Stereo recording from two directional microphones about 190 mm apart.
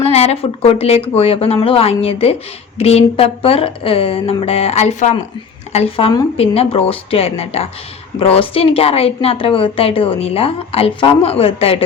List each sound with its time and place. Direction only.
0.0 s a woman's voice: 35° left (ahead or behind)